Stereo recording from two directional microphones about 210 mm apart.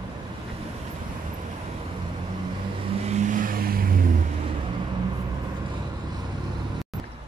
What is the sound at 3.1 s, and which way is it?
Boat, 35° right (ahead or behind).